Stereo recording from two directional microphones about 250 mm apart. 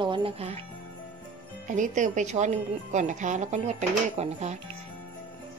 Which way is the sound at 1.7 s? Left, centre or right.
Right.